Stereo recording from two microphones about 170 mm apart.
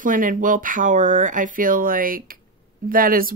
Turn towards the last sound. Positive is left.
turn(degrees=-55)  # may be behind; listen again after turning